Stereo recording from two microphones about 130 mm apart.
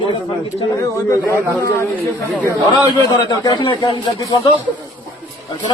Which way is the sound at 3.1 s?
30° left (ahead or behind).